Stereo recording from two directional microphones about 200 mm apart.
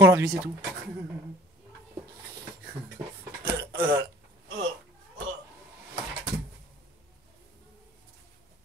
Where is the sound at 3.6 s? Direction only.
10° right (ahead or behind).